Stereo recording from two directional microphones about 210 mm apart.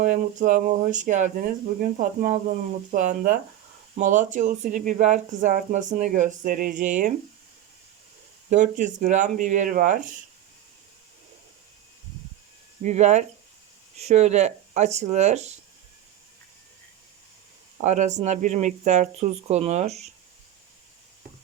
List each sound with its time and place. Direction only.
0.0 s speech: 40° right (ahead or behind)
8.4 s speech: 35° right (ahead or behind)
12.8 s speech: 35° right (ahead or behind)
17.7 s speech: 35° right (ahead or behind)